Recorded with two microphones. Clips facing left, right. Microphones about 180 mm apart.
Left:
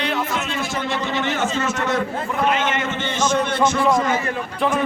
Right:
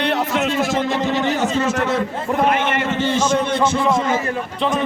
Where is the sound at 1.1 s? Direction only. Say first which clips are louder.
Right 3 dB; 35° right (ahead or behind).